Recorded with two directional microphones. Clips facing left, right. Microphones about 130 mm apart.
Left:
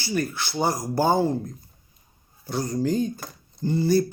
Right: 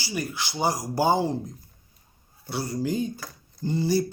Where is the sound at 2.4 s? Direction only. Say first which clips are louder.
Left 3 dB; 10° right (ahead or behind).